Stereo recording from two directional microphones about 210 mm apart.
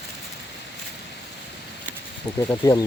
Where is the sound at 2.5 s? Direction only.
15° left (ahead or behind).